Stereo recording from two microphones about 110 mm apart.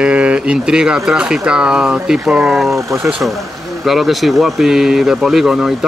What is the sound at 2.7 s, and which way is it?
Speech, 25° right (ahead or behind).